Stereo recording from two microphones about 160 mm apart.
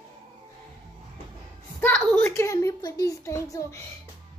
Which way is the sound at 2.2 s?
20° left (ahead or behind).